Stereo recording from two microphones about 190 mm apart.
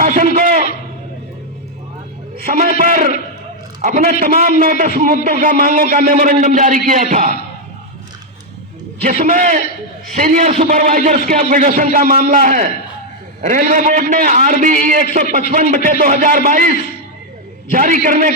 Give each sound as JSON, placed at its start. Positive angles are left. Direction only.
{"t": 0.0, "sound": "a sound", "side_deg": -45}
{"t": 2.5, "sound": "a man's voice", "side_deg": -45}
{"t": 9.0, "sound": "a man's voice", "side_deg": -40}
{"t": 17.7, "sound": "a man's voice", "side_deg": -45}